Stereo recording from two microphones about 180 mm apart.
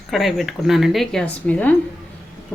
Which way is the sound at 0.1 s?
Centre (ahead or behind).